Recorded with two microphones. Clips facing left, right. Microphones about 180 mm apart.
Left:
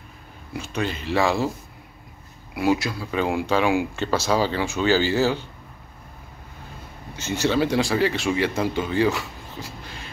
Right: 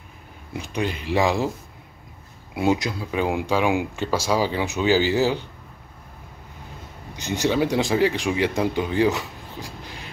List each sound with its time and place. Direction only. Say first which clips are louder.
0.5 s speech: right 1 dB; 15° right (ahead or behind)
2.5 s speech: even; 20° right (ahead or behind)
7.2 s speech: even; 15° right (ahead or behind)